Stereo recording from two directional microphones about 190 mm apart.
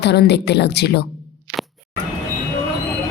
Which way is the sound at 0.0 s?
65° left (ahead or behind).